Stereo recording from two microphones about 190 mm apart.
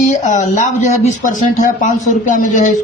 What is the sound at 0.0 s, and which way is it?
Speech, 40° left (ahead or behind).